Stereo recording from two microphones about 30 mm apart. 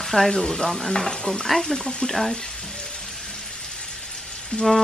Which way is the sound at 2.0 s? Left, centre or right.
Centre.